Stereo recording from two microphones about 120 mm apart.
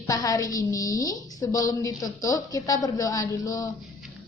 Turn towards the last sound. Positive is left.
turn(degrees=30)  # may be behind; listen again after turning